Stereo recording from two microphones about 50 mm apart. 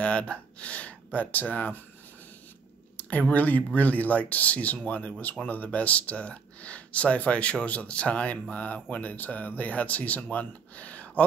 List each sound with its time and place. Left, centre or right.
0.0 s speech: left
3.0 s speech: left